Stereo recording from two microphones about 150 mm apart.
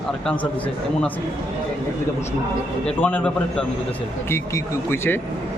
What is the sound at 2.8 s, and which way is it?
Speech, 10° left (ahead or behind).